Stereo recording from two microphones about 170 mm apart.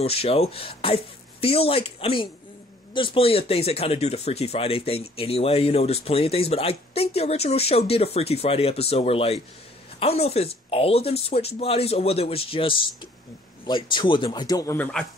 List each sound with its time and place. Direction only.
0.0 s speech: 35° left (ahead or behind)
14.8 s a man's voice: 5° left (ahead or behind)